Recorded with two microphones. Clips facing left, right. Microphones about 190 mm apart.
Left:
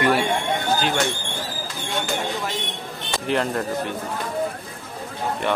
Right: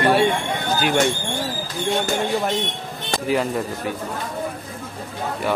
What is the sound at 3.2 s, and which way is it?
Speech, 5° right (ahead or behind).